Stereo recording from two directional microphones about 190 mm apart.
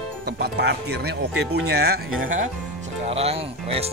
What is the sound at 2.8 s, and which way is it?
Speech, 35° right (ahead or behind).